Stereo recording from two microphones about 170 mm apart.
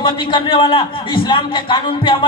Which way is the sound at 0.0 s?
30° left (ahead or behind).